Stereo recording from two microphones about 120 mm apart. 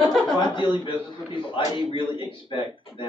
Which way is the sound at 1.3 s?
45° left (ahead or behind).